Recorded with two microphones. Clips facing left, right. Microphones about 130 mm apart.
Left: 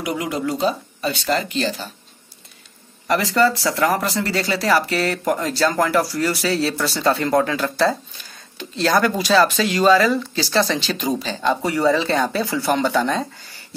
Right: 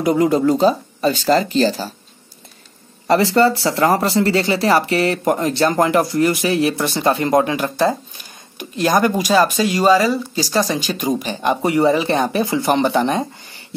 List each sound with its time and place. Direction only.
0.0 s speech: 40° right (ahead or behind)
3.1 s speech: 30° right (ahead or behind)